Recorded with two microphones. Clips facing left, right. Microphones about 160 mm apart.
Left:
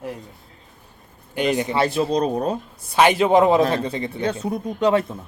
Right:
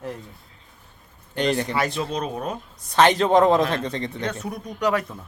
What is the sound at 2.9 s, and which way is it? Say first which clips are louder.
A man's voice: left 1 dB; 10° left (ahead or behind).